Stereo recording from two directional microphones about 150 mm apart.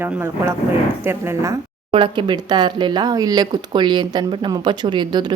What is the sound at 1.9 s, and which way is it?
Speech, 35° right (ahead or behind).